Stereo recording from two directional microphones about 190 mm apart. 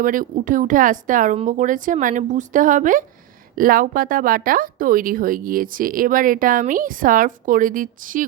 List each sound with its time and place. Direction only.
0.0 s a woman's voice: 45° right (ahead or behind)